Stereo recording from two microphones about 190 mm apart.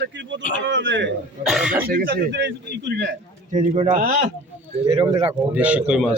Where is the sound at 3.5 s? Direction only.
35° right (ahead or behind).